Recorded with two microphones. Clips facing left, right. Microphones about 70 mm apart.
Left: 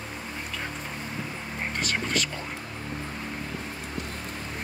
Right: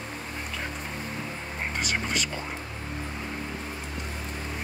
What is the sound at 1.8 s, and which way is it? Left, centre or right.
Speech, centre.